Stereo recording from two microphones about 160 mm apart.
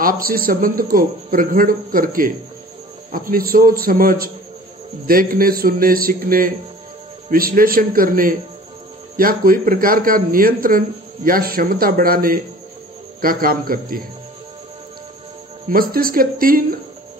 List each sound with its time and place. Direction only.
0.0 s speech: 65° right (ahead or behind)
15.7 s speech: 65° right (ahead or behind)